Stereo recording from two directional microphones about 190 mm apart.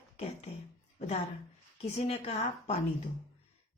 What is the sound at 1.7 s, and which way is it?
A woman's voice, 35° left (ahead or behind).